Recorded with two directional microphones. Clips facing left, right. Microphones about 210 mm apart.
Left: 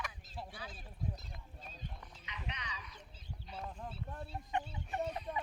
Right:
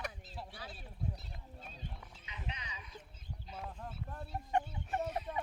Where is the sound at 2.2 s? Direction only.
30° right (ahead or behind).